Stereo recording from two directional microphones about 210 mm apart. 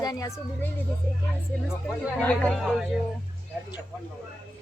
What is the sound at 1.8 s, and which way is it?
Speech, 5° left (ahead or behind).